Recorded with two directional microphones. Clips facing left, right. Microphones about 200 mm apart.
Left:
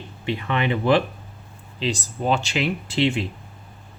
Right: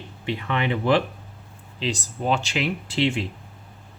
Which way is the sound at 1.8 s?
30° left (ahead or behind).